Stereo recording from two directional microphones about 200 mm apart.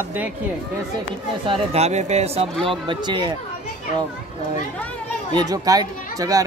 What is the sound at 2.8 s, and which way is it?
Speech, 25° right (ahead or behind).